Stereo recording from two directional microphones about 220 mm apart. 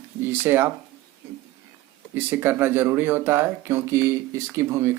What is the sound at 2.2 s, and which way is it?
Speech, 10° right (ahead or behind).